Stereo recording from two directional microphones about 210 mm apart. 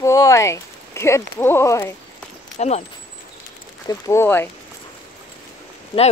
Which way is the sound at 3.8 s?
15° left (ahead or behind).